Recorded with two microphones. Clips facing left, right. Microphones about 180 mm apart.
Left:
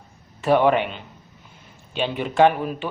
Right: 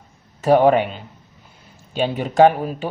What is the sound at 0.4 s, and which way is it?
Speech, 40° right (ahead or behind).